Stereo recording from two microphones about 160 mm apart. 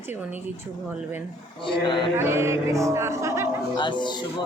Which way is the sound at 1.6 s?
30° left (ahead or behind).